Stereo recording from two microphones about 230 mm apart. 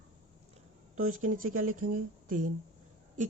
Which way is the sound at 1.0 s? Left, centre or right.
Right.